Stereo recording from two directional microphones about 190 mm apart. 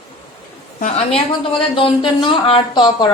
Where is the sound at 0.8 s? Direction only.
35° left (ahead or behind).